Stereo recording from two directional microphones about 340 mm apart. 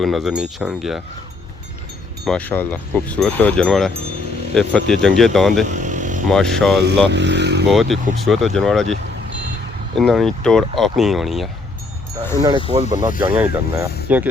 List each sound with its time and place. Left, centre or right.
0.0 s speech: centre
2.2 s speech: centre
5.6 s motorcycle: right
6.3 s speech: centre
7.1 s speech: right
7.7 s speech: centre
10.0 s speech: centre
12.4 s speech: centre